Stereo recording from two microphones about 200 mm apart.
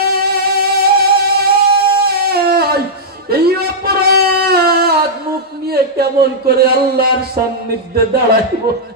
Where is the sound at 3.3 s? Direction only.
50° right (ahead or behind).